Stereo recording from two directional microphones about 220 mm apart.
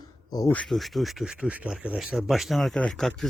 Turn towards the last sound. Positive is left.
turn(degrees=0)  # may be behind; listen again after turning